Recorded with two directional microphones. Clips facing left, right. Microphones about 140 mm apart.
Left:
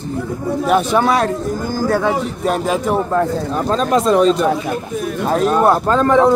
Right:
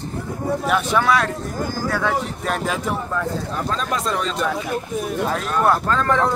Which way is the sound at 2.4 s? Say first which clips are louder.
Left 9 dB; 25° left (ahead or behind).